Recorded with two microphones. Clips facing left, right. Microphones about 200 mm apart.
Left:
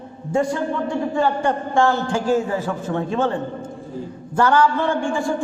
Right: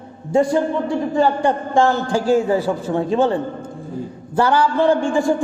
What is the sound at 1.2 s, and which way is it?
Speech, 35° right (ahead or behind).